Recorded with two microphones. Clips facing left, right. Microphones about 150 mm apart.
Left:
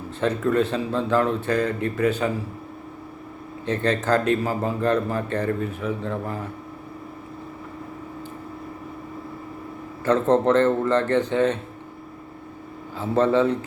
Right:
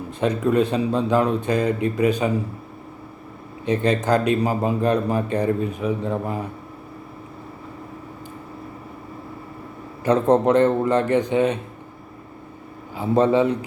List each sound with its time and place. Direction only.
0.2 s speech: 15° right (ahead or behind)
3.7 s speech: 15° right (ahead or behind)
10.0 s speech: 15° right (ahead or behind)
13.0 s speech: 15° right (ahead or behind)